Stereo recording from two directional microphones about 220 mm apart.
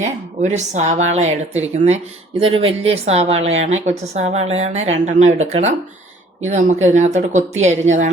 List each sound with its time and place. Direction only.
0.0 s a woman's voice: 30° right (ahead or behind)